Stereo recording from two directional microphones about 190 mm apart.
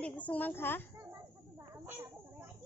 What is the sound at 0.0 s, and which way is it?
Speech, 5° left (ahead or behind).